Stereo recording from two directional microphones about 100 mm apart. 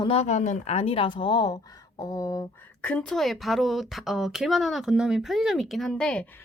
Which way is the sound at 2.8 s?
10° left (ahead or behind).